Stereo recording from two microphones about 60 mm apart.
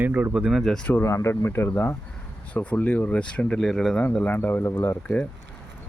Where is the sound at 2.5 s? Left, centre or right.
Left.